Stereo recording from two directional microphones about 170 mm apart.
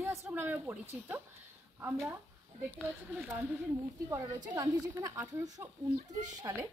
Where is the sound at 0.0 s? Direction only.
15° right (ahead or behind).